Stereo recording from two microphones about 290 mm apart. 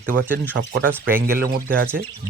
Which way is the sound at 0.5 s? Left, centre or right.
Right.